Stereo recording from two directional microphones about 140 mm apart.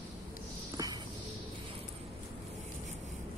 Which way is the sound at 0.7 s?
25° right (ahead or behind).